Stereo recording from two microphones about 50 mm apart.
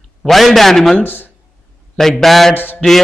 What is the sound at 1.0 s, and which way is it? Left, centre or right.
Speech, left.